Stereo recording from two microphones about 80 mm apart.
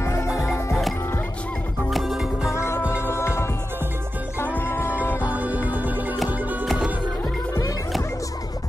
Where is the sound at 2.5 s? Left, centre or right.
Left.